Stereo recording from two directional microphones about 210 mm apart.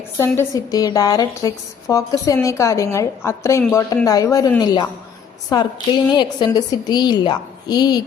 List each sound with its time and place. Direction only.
0.2 s a woman's voice: 15° left (ahead or behind)